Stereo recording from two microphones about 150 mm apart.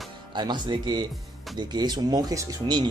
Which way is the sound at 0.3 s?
30° right (ahead or behind).